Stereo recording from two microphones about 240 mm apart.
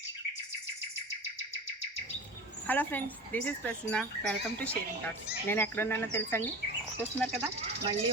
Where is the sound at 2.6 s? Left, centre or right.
Centre.